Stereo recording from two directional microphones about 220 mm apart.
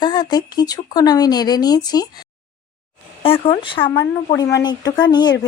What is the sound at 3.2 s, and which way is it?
Speech, 25° left (ahead or behind).